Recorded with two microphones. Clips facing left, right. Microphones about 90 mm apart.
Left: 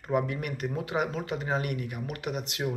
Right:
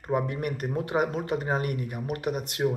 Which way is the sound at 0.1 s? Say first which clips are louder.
Right 1 dB; 40° right (ahead or behind).